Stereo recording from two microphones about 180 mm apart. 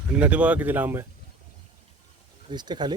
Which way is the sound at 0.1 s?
5° right (ahead or behind).